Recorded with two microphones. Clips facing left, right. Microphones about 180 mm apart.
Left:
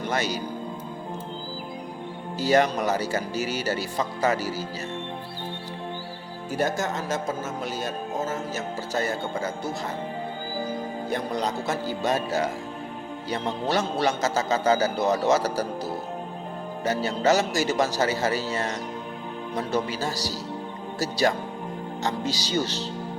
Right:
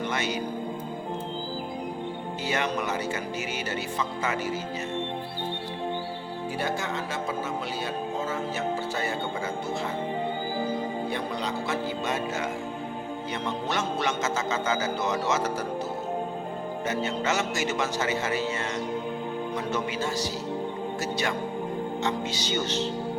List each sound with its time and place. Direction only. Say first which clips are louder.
0.0 s music: left 2 dB; 40° left (ahead or behind)
2.4 s speech: left 8 dB; 40° left (ahead or behind)
6.6 s speech: left 5 dB; 45° left (ahead or behind)
11.1 s speech: left 3 dB; 45° left (ahead or behind)
16.8 s speech: left 6 dB; 35° left (ahead or behind)